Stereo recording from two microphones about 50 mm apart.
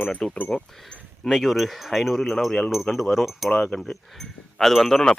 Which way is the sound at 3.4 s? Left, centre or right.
Centre.